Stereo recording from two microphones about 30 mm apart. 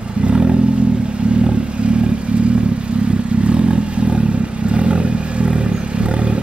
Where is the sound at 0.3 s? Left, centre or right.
Right.